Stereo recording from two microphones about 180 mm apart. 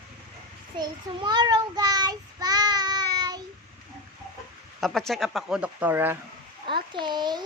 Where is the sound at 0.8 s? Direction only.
25° right (ahead or behind).